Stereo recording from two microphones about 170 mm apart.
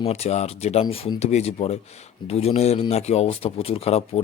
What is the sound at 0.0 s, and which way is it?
Speech, 40° left (ahead or behind).